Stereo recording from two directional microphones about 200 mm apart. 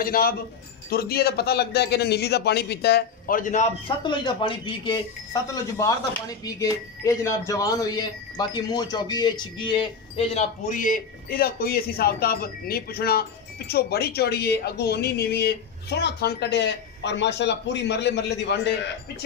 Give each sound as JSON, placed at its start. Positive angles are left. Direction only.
{"t": 0.0, "sound": "a man's voice", "side_deg": 45}
{"t": 3.8, "sound": "speech", "side_deg": 25}